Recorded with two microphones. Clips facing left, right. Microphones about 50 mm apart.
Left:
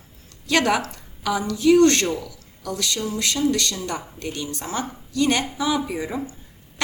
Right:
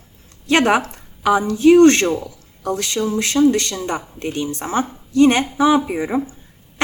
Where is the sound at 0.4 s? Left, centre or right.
Right.